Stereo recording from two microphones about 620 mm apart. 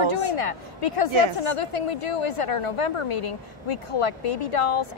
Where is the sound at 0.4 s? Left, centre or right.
Left.